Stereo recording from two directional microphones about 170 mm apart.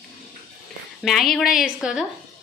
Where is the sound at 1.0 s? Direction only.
Centre (ahead or behind).